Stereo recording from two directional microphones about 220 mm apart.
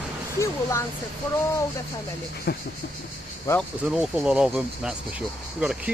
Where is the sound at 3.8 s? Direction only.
5° right (ahead or behind).